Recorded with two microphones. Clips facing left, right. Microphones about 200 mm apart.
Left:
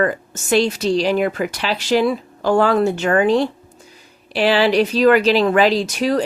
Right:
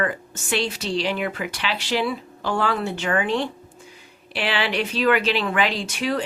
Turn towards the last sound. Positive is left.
turn(degrees=40)  # may be behind; listen again after turning